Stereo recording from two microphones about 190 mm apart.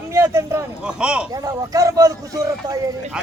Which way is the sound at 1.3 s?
20° right (ahead or behind).